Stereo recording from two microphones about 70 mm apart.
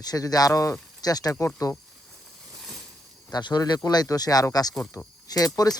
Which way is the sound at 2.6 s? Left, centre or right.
Centre.